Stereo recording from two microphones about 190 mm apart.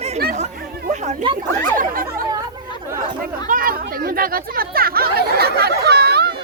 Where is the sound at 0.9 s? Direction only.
40° right (ahead or behind).